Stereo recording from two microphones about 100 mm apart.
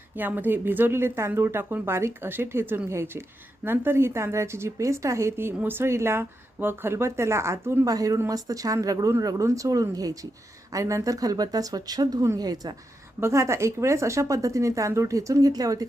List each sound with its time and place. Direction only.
0.2 s speech: 20° right (ahead or behind)
7.9 s speech: 35° right (ahead or behind)
13.1 s speech: 30° right (ahead or behind)